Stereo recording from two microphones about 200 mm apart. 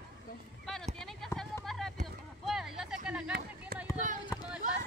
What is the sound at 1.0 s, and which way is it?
Run, centre (ahead or behind).